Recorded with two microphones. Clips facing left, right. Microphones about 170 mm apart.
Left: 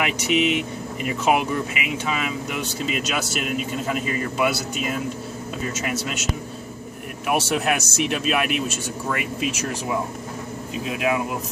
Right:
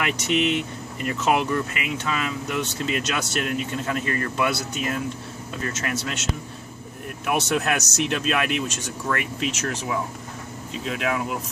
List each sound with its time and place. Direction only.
0.0 s speech: 5° left (ahead or behind)
7.2 s speech: 10° left (ahead or behind)